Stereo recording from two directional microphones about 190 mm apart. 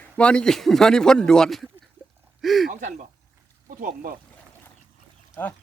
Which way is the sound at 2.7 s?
40° right (ahead or behind).